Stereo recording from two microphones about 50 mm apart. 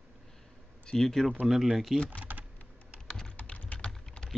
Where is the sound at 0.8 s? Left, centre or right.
Centre.